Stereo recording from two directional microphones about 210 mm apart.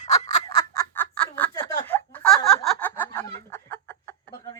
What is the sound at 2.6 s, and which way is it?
Chicken, 10° left (ahead or behind).